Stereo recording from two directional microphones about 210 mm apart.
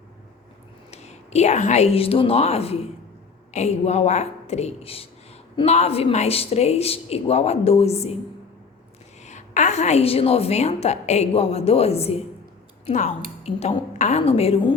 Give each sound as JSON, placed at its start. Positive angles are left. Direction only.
{"t": 0.9, "sound": "a woman's voice", "side_deg": 30}
{"t": 9.2, "sound": "a woman's voice", "side_deg": 35}